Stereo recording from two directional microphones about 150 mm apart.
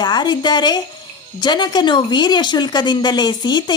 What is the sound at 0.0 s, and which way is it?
A woman's voice, 30° left (ahead or behind).